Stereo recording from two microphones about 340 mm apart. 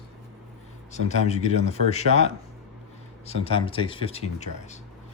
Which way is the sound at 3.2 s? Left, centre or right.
Centre.